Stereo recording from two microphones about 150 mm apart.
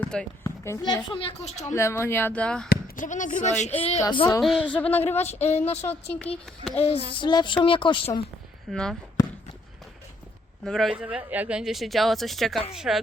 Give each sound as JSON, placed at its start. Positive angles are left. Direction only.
{"t": 0.0, "sound": "speech", "side_deg": 5}
{"t": 0.4, "sound": "a sound", "side_deg": 20}
{"t": 1.0, "sound": "speech", "side_deg": 40}
{"t": 1.7, "sound": "speech", "side_deg": 20}
{"t": 2.6, "sound": "speech", "side_deg": 75}
{"t": 4.0, "sound": "speech", "side_deg": 35}
{"t": 4.4, "sound": "speech", "side_deg": 0}
{"t": 5.2, "sound": "speech", "side_deg": 45}
{"t": 7.1, "sound": "speech", "side_deg": 30}
{"t": 8.7, "sound": "speech", "side_deg": 5}
{"t": 10.6, "sound": "speech", "side_deg": 0}